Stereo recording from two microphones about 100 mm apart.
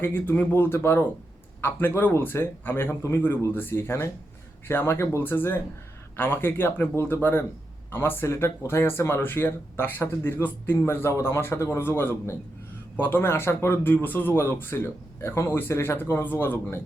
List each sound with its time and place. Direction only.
0.0 s speech: 20° left (ahead or behind)